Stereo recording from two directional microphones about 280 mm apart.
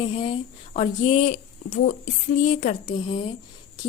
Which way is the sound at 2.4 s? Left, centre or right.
Left.